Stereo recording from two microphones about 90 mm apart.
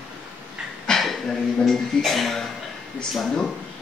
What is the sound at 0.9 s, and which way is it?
Speech, 5° left (ahead or behind).